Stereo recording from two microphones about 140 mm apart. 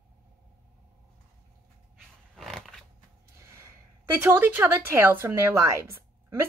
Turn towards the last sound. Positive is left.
turn(degrees=-15)  # may be behind; listen again after turning